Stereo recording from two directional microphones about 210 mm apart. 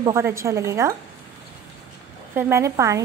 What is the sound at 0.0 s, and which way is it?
Speech, 15° right (ahead or behind).